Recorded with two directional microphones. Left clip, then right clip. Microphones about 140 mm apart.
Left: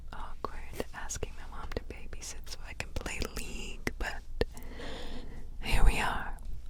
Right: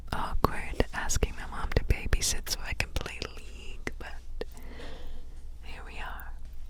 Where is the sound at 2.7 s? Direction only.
10° right (ahead or behind).